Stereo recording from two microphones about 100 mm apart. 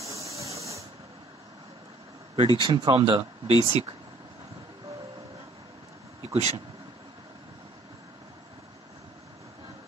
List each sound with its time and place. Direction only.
0.4 s spray: 30° right (ahead or behind)
2.3 s speech: 60° right (ahead or behind)
6.2 s speech: 90° right